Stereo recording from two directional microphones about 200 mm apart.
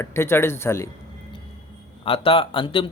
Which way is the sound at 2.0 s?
25° left (ahead or behind).